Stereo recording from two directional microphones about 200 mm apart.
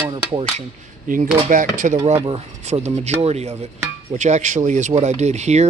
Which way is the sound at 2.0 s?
30° right (ahead or behind).